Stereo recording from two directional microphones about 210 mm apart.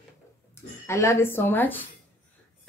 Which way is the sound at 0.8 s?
15° left (ahead or behind).